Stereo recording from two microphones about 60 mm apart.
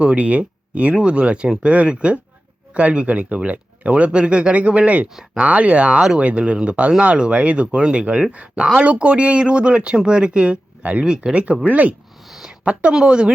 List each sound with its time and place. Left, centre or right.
0.0 s speech: right
12.3 s a sound: centre
12.9 s speech: centre